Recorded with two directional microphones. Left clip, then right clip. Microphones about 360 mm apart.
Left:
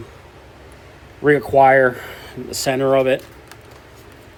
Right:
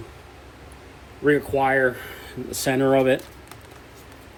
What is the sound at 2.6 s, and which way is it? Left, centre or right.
Speech, centre.